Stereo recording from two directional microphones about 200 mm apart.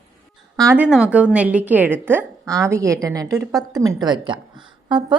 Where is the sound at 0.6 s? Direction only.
10° right (ahead or behind).